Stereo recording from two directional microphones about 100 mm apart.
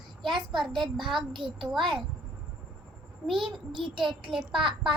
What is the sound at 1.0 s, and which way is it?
Speech, centre (ahead or behind).